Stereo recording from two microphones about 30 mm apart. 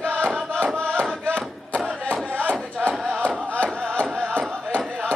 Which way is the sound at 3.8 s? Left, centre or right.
Left.